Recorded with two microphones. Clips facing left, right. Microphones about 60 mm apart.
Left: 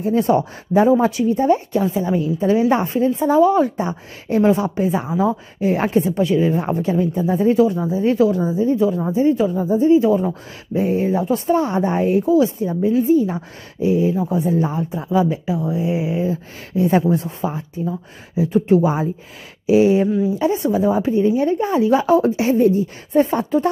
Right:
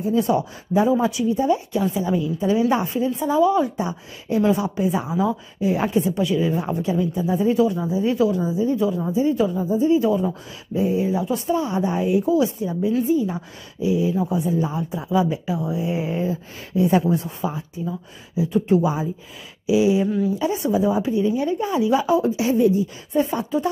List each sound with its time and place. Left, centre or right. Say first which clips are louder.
0.0 s speech: left 3 dB; left
1.8 s speech: left 3 dB; left
5.6 s speech: left 3 dB; left
8.7 s speech: left 3 dB; left
9.6 s speech: left 4 dB; left
9.9 s speech: left 4 dB; left
10.7 s speech: left 3 dB; left
15.1 s speech: left 3 dB; left
16.0 s speech: left 3 dB; centre
16.3 s speech: left 3 dB; left
19.6 s speech: left 4 dB; left
20.3 s speech: left 3 dB; left
22.2 s speech: left 3 dB; left